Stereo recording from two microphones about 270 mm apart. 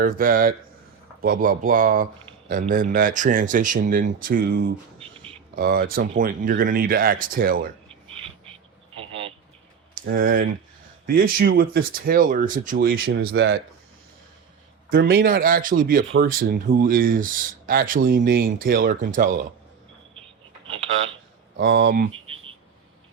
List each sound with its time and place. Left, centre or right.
0.0 s speech: right
4.9 s a sound: centre
5.5 s speech: right
10.1 s speech: right
14.8 s speech: right
21.6 s speech: right